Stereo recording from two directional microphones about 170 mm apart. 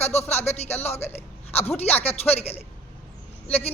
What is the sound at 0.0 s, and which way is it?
A man's voice, 40° left (ahead or behind).